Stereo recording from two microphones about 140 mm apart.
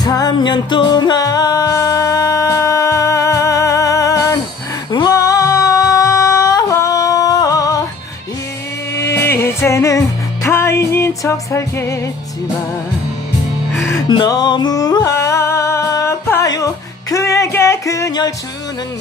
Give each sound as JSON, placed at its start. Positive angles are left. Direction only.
{"t": 0.0, "sound": "music", "side_deg": 25}
{"t": 8.9, "sound": "music", "side_deg": 20}
{"t": 14.1, "sound": "music", "side_deg": 30}